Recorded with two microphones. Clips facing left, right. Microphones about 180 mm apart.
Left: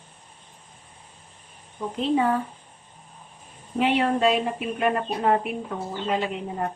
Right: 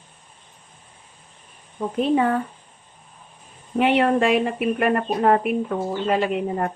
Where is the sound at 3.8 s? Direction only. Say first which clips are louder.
Right 4 dB; 60° right (ahead or behind).